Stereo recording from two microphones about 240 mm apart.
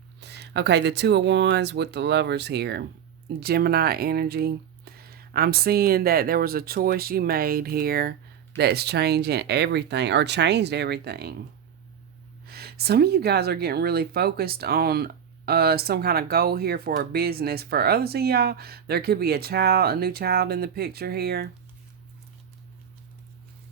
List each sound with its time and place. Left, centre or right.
0.2 s speech: right
12.5 s speech: right